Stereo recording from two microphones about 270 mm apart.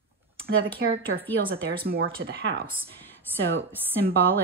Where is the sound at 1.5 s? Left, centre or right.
Right.